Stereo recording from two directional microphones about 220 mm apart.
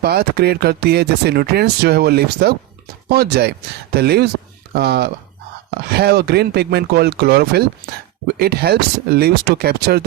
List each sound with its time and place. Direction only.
0.0 s speech: 45° right (ahead or behind)